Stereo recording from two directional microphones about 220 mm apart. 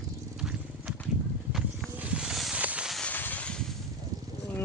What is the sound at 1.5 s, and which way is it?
Wild animals, 5° right (ahead or behind).